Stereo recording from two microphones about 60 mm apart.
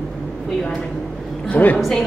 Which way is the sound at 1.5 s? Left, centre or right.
Left.